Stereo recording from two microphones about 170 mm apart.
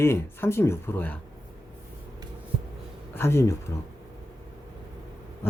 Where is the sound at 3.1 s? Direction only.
15° left (ahead or behind).